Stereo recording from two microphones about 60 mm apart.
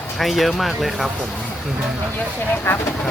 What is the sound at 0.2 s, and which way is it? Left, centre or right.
Speech, centre.